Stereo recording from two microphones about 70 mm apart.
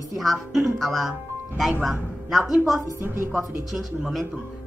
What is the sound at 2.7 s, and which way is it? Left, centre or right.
Speech, right.